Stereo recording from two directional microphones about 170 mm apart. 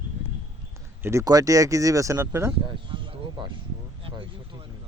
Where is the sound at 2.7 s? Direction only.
30° right (ahead or behind).